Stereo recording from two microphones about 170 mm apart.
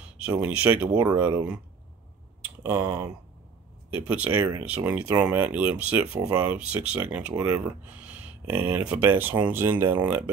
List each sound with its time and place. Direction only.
0.4 s speech: 10° right (ahead or behind)
2.6 s speech: 20° right (ahead or behind)
3.9 s speech: 10° right (ahead or behind)